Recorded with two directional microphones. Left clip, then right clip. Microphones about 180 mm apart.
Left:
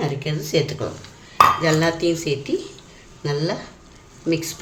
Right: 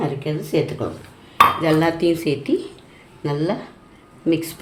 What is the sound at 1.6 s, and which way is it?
A woman's voice, 35° right (ahead or behind).